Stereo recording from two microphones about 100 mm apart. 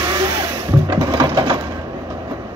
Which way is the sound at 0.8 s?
35° right (ahead or behind).